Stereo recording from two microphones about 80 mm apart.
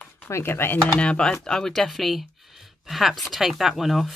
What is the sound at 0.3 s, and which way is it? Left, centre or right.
Speech, left.